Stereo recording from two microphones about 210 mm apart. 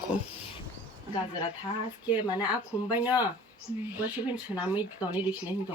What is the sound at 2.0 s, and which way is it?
Speech, 10° right (ahead or behind).